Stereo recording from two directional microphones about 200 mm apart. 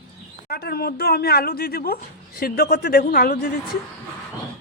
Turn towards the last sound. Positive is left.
turn(degrees=45)  # may be behind; listen again after turning